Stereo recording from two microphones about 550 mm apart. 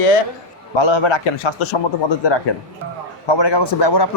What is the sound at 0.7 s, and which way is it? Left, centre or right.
A man's voice, left.